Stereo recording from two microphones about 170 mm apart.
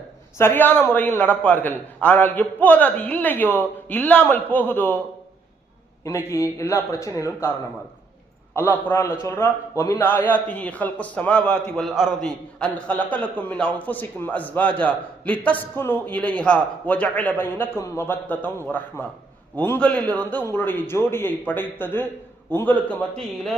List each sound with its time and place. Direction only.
0.3 s a man's voice: 10° left (ahead or behind)
6.1 s a man's voice: 15° left (ahead or behind)
8.5 s a man's voice: 10° left (ahead or behind)